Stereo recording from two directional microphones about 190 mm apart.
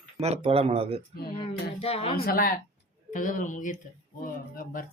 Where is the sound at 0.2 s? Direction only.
30° right (ahead or behind).